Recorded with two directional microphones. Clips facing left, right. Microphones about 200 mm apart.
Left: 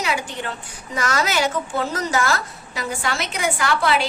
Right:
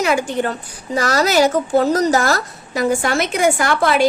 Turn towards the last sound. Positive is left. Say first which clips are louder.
# right 5 dB
turn(degrees=-45)  # may be behind; listen again after turning